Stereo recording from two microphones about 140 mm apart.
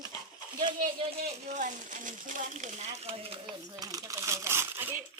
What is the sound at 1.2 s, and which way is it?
Speech, 65° right (ahead or behind).